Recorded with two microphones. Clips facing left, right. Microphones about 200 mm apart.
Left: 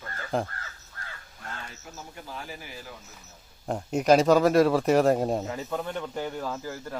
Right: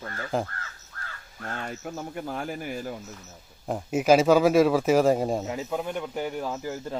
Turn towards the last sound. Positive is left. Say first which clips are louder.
# right 2 dB
turn(degrees=-20)  # may be behind; listen again after turning